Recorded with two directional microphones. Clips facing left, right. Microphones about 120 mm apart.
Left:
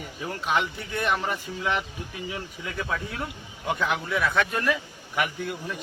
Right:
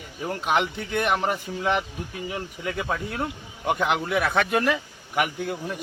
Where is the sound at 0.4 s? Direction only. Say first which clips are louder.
Right 2 dB; 60° right (ahead or behind).